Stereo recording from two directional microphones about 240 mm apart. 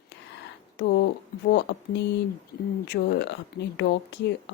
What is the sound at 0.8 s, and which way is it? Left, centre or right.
Speech, left.